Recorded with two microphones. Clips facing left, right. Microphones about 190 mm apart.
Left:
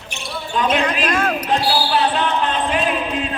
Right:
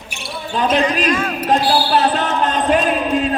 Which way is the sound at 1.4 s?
45° right (ahead or behind).